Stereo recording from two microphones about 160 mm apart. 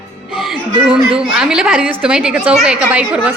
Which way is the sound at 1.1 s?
5° right (ahead or behind).